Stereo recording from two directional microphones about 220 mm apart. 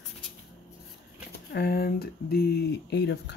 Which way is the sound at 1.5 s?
45° left (ahead or behind).